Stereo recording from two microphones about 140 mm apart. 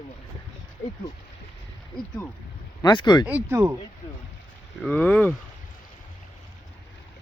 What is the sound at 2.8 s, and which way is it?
Speech, 30° left (ahead or behind).